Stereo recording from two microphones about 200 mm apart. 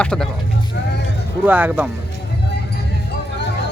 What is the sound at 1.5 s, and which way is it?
Speech, 10° right (ahead or behind).